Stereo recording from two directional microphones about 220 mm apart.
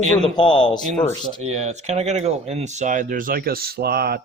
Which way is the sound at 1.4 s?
30° right (ahead or behind).